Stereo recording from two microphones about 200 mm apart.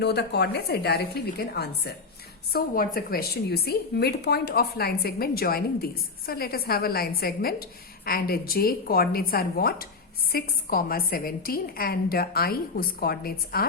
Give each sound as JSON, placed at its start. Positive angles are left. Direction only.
{"t": 0.0, "sound": "a woman's voice", "side_deg": 55}